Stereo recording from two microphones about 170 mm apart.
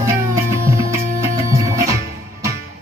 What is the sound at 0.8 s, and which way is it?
Music, 15° right (ahead or behind).